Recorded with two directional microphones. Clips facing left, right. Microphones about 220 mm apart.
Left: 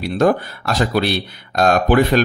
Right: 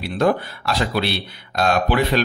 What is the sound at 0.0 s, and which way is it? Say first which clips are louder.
Speech: left 3 dB; 45° left (ahead or behind).